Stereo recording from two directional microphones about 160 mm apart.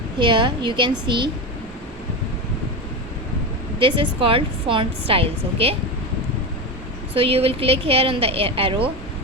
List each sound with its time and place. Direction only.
0.2 s a woman's voice: 30° right (ahead or behind)
3.8 s a woman's voice: 35° right (ahead or behind)
7.1 s a woman's voice: 35° right (ahead or behind)